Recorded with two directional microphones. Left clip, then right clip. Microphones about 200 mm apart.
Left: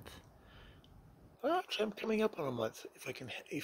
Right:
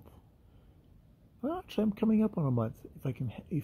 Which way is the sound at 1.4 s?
Centre (ahead or behind).